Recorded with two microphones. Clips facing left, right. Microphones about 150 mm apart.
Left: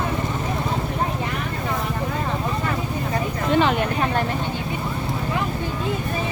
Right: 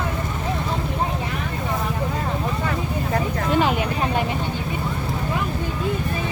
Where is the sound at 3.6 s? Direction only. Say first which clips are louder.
Left 1 dB; 5° right (ahead or behind).